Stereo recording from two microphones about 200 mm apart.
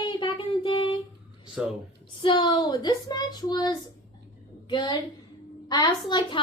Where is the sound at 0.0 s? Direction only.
25° left (ahead or behind).